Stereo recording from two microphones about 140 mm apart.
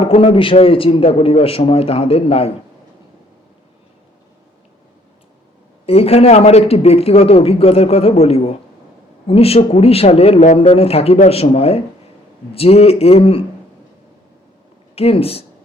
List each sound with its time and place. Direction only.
0.0 s a man's voice: 40° left (ahead or behind)
5.8 s a man's voice: 45° left (ahead or behind)
14.9 s a man's voice: 45° left (ahead or behind)